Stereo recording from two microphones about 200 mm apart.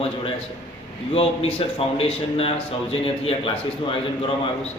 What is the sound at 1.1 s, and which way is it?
A man's voice, 30° left (ahead or behind).